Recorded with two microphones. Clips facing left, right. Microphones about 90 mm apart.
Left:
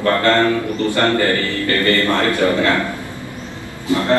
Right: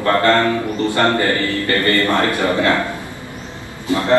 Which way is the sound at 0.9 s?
20° right (ahead or behind).